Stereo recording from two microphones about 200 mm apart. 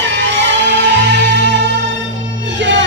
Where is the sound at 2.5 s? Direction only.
65° right (ahead or behind).